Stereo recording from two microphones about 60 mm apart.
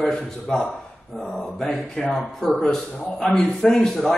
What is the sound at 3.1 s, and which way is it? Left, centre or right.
A man's voice, centre.